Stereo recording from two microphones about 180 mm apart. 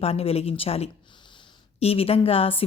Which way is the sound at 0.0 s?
35° left (ahead or behind).